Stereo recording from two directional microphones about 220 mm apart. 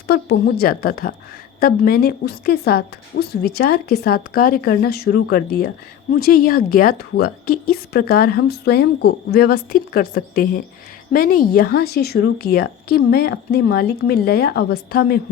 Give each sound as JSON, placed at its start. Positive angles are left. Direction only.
{"t": 0.1, "sound": "a woman's voice", "side_deg": 45}